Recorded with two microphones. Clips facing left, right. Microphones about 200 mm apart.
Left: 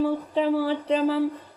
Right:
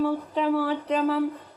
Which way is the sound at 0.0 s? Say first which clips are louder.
Left 1 dB; 30° left (ahead or behind).